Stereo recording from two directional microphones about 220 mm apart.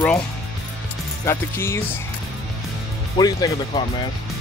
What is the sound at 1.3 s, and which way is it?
Speech, 10° left (ahead or behind).